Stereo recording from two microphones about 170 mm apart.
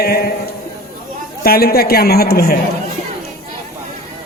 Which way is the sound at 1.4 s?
65° left (ahead or behind).